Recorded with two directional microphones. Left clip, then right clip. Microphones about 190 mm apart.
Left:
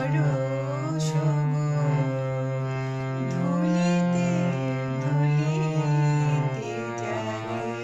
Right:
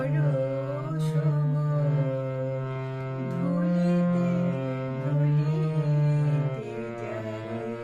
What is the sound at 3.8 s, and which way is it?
Music, 25° left (ahead or behind).